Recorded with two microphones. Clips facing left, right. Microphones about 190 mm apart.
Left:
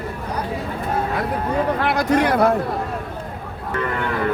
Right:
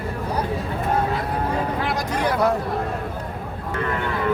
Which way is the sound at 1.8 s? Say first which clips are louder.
Left 5 dB; 65° left (ahead or behind).